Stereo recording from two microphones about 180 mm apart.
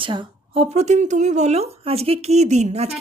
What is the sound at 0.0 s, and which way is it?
Speech, 25° right (ahead or behind).